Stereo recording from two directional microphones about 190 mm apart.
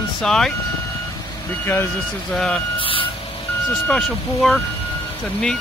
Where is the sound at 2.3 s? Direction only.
Centre (ahead or behind).